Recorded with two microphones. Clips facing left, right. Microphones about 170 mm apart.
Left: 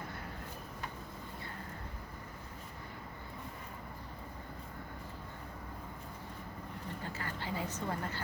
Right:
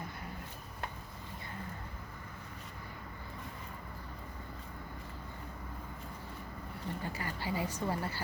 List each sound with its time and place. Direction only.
7.0 s a woman's voice: 10° right (ahead or behind)